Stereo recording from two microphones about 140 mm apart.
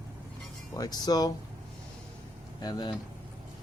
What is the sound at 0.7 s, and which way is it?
Speech, 25° left (ahead or behind).